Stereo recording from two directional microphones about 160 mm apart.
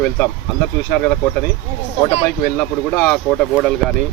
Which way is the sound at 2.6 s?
10° left (ahead or behind).